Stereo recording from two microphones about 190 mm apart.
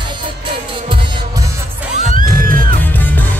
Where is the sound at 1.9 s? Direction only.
45° right (ahead or behind).